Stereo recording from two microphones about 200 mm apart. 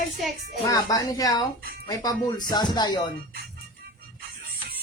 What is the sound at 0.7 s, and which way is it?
Speech, 20° left (ahead or behind).